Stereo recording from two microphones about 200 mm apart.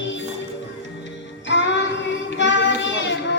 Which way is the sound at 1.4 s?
65° left (ahead or behind).